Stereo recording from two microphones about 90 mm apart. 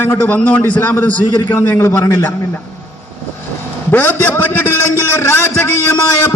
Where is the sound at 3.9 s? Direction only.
20° left (ahead or behind).